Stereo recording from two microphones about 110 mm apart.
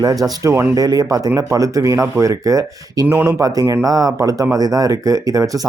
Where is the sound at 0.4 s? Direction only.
20° right (ahead or behind).